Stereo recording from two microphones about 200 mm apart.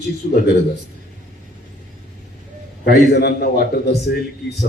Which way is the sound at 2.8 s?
50° left (ahead or behind).